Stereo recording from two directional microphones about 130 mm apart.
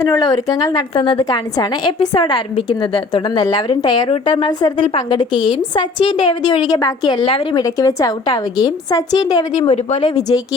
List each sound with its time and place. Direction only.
0.0 s a woman's voice: 25° left (ahead or behind)
1.2 s a woman's voice: 30° left (ahead or behind)
2.1 s a woman's voice: 40° left (ahead or behind)
7.6 s a woman's voice: 25° left (ahead or behind)
9.6 s speech: 50° left (ahead or behind)
10.2 s a woman's voice: 30° left (ahead or behind)